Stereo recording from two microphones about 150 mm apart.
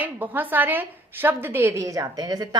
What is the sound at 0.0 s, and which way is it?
Speech, 10° right (ahead or behind).